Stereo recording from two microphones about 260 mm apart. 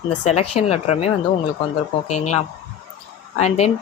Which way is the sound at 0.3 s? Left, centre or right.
Left.